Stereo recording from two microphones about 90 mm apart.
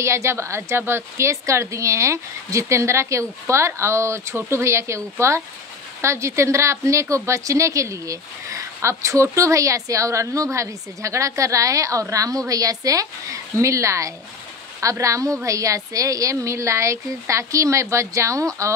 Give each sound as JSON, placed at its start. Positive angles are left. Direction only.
{"t": 0.0, "sound": "a woman's voice", "side_deg": -30}